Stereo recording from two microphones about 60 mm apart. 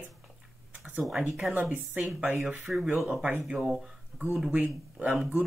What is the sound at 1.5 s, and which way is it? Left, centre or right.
Speech, right.